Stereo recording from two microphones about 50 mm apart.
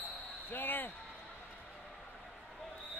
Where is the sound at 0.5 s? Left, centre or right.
Left.